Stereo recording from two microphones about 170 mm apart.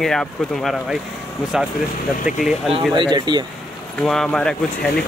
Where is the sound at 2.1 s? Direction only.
50° left (ahead or behind).